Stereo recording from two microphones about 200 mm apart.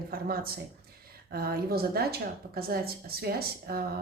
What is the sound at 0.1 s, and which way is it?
Speech, 50° right (ahead or behind).